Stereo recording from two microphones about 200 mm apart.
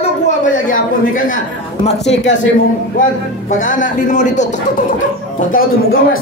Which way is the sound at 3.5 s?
40° left (ahead or behind).